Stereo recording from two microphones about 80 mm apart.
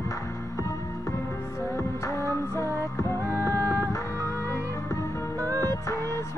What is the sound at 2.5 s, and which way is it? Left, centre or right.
Music, left.